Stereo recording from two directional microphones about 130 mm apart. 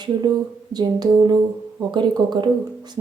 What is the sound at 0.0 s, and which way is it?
Speech, 30° right (ahead or behind).